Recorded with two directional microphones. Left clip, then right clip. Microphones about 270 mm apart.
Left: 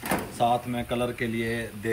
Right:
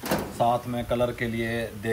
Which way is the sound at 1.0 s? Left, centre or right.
Centre.